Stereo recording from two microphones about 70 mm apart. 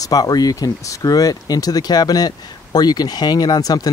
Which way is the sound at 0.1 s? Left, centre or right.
Left.